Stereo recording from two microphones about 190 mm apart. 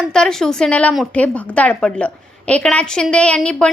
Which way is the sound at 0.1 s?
5° left (ahead or behind).